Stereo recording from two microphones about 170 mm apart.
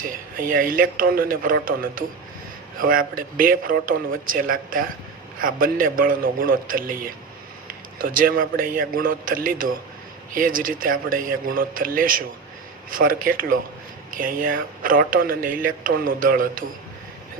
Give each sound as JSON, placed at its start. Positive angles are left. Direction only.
{"t": 0.0, "sound": "speech", "side_deg": -55}